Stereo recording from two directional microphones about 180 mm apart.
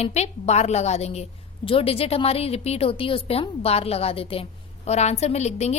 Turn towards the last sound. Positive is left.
turn(degrees=35)  # may be behind; listen again after turning